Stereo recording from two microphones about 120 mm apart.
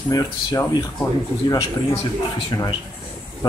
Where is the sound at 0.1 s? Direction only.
30° left (ahead or behind).